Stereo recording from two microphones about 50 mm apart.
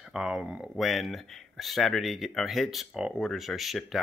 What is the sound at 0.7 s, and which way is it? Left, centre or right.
Speech, centre.